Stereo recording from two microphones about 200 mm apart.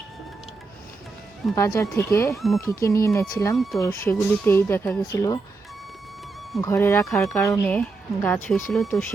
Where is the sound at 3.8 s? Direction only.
15° left (ahead or behind).